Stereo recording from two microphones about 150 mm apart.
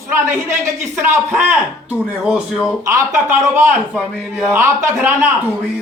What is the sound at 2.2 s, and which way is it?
Speech, 5° right (ahead or behind).